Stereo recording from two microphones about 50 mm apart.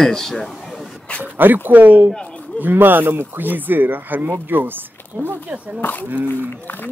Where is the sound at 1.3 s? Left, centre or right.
Right.